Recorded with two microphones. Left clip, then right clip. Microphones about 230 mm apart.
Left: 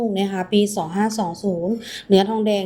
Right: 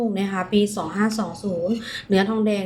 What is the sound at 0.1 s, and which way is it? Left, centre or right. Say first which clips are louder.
Speech: left 2 dB; centre.